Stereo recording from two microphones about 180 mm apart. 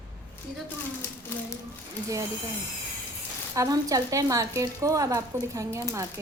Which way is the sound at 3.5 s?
20° right (ahead or behind).